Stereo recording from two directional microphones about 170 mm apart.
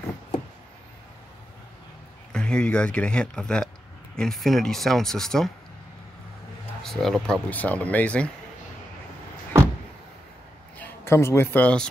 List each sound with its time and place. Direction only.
2.3 s speech: 5° left (ahead or behind)
6.8 s speech: centre (ahead or behind)
10.8 s a man's voice: 15° left (ahead or behind)